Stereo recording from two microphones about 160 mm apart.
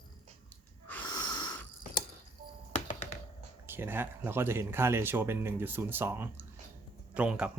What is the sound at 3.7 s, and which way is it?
Speech, 15° right (ahead or behind).